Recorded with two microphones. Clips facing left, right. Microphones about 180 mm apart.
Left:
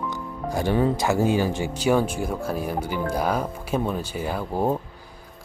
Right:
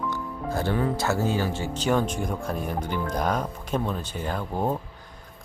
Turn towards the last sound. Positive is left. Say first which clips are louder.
# left 3 dB
turn(degrees=10)  # may be behind; listen again after turning